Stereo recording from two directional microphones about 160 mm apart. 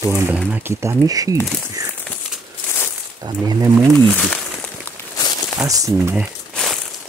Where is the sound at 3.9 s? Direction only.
5° left (ahead or behind).